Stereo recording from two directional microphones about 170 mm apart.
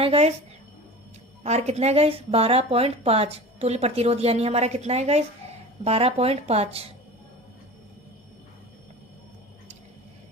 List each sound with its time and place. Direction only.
0.0 s a woman's voice: 35° right (ahead or behind)
1.5 s a woman's voice: 40° right (ahead or behind)